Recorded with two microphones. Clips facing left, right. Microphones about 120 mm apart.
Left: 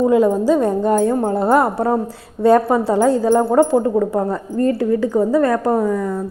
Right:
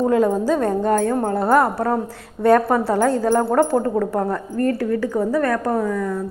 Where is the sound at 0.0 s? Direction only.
5° left (ahead or behind).